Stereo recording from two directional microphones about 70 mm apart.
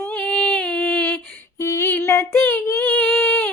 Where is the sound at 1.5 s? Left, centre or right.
Left.